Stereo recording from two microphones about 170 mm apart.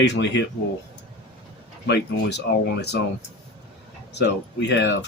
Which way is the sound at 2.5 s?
70° left (ahead or behind).